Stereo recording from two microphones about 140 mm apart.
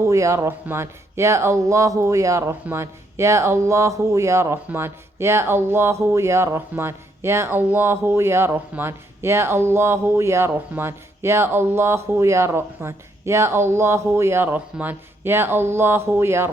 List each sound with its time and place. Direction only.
0.0 s speech: 20° right (ahead or behind)